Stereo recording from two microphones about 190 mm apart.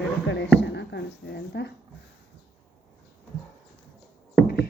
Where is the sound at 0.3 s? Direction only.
65° left (ahead or behind).